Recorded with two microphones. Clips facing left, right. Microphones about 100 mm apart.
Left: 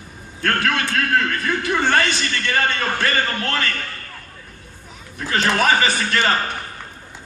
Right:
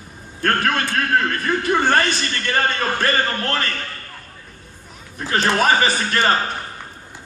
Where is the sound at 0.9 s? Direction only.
20° right (ahead or behind).